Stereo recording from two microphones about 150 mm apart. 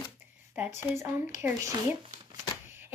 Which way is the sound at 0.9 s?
20° right (ahead or behind).